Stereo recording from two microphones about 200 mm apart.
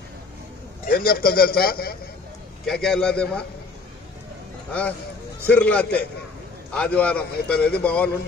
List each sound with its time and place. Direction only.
0.8 s a man's voice: 50° left (ahead or behind)
2.6 s a man's voice: 5° left (ahead or behind)
5.5 s a man's voice: 5° left (ahead or behind)